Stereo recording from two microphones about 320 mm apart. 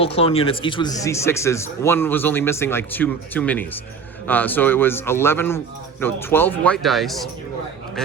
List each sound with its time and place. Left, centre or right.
0.0 s speech: centre